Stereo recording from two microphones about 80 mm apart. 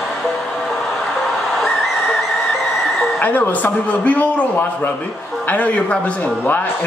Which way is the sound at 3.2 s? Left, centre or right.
Left.